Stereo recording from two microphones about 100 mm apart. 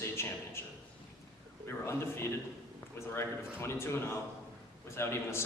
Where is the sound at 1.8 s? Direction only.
25° left (ahead or behind).